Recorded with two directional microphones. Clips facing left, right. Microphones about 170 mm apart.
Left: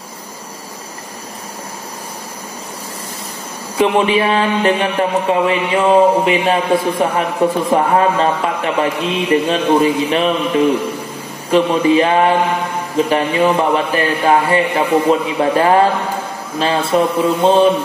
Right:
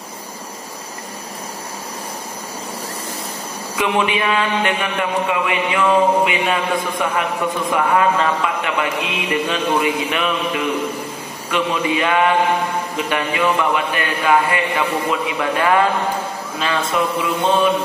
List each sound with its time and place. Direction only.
3.7 s a man's voice: 35° left (ahead or behind)